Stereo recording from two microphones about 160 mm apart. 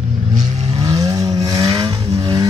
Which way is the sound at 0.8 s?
25° right (ahead or behind).